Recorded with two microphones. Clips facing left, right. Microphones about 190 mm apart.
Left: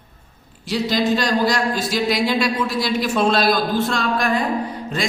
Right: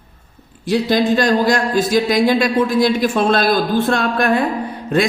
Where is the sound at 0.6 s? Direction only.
55° right (ahead or behind).